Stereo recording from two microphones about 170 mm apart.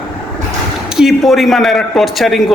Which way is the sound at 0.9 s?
Centre (ahead or behind).